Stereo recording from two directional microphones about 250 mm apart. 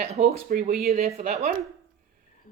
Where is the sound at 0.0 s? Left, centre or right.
Right.